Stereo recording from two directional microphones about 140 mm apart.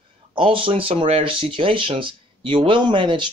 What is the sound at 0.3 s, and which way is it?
Speech, 35° right (ahead or behind).